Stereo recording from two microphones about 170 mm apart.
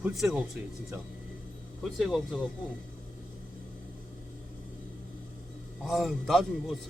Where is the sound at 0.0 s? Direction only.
5° right (ahead or behind).